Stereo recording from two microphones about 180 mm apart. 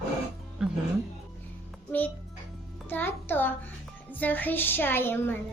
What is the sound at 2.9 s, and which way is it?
A child's voice, 10° left (ahead or behind).